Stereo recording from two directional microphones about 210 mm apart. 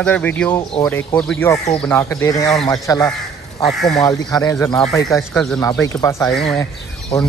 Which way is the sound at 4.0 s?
15° left (ahead or behind).